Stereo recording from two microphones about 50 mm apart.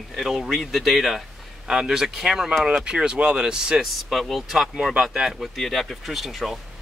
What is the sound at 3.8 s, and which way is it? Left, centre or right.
Speech, centre.